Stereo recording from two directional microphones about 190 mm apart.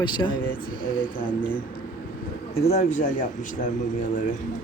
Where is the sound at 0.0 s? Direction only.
25° left (ahead or behind).